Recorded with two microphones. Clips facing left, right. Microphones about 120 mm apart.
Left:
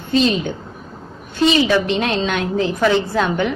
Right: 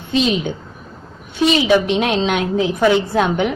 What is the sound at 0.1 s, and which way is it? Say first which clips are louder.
A woman's voice: left 1 dB; 15° right (ahead or behind).